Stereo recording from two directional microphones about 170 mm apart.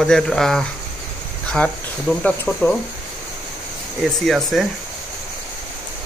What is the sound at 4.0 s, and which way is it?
Speech, centre (ahead or behind).